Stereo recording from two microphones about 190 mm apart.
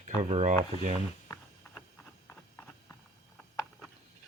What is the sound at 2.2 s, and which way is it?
Horse, 10° left (ahead or behind).